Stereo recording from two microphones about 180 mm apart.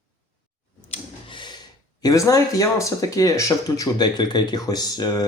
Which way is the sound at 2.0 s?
20° left (ahead or behind).